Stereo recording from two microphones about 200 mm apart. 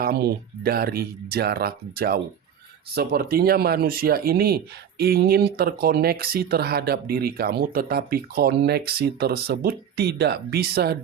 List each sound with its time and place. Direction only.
0.0 s speech: 50° right (ahead or behind)